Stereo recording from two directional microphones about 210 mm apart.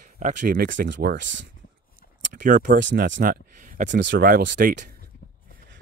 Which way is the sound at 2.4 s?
35° right (ahead or behind).